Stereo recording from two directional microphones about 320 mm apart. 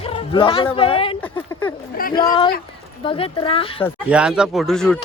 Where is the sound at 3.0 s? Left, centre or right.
Centre.